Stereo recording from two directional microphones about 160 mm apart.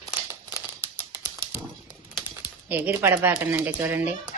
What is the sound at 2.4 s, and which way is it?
Speech, 10° right (ahead or behind).